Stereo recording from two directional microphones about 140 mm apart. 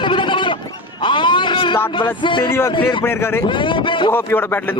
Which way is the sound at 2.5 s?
15° left (ahead or behind).